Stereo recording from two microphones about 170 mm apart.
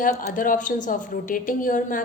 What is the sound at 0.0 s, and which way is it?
A woman's voice, 55° left (ahead or behind).